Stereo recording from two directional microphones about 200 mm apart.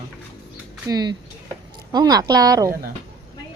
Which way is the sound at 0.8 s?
20° right (ahead or behind).